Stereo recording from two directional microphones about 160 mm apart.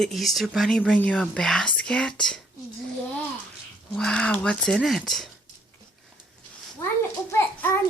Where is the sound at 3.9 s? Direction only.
5° left (ahead or behind).